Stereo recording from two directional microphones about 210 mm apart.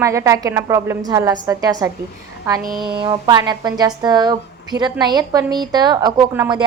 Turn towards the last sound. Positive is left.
turn(degrees=-20)  # may be behind; listen again after turning